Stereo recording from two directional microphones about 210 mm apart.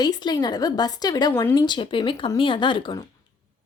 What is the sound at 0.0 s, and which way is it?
Speech, 20° left (ahead or behind).